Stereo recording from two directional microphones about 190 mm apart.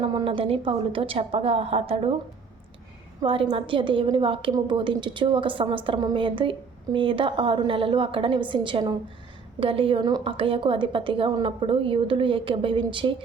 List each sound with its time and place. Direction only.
0.0 s a woman's voice: 25° right (ahead or behind)
3.2 s a woman's voice: 25° right (ahead or behind)